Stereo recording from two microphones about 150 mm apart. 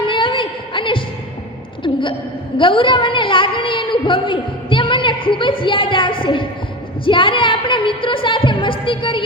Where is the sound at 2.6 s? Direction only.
35° left (ahead or behind).